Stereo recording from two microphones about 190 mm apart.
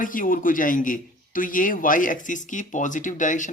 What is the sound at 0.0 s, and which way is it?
A man's voice, 45° left (ahead or behind).